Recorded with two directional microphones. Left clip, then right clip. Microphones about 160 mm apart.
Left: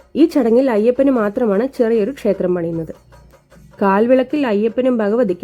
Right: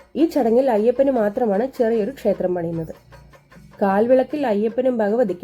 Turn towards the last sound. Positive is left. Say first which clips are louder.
# left 3 dB
turn(degrees=40)  # may be behind; listen again after turning